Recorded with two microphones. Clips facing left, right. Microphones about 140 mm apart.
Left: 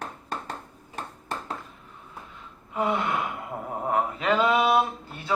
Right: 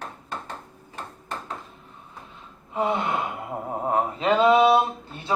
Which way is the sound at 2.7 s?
25° right (ahead or behind).